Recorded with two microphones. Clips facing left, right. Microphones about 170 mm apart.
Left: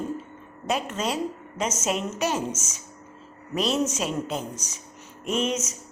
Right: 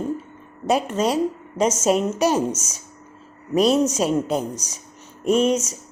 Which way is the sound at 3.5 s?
40° right (ahead or behind).